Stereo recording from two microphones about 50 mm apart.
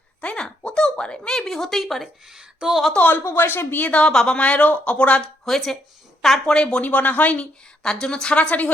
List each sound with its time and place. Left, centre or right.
0.2 s a sound: centre
2.2 s speech: centre
2.9 s speech: left
3.2 s speech: left
3.9 s speech: centre
5.5 s a woman's voice: centre
6.6 s speech: left
7.8 s speech: centre